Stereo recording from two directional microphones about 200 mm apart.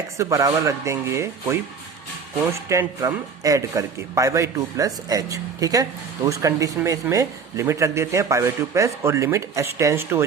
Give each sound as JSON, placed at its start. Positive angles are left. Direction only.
{"t": 0.2, "sound": "a man's voice", "side_deg": -15}
{"t": 2.6, "sound": "a man's voice", "side_deg": -15}